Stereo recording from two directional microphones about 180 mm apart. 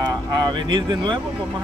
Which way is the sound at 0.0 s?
25° right (ahead or behind).